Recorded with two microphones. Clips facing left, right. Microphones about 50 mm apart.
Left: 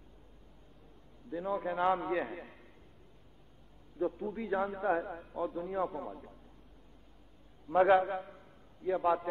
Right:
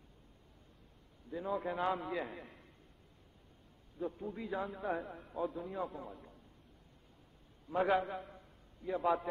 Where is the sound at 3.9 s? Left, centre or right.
Centre.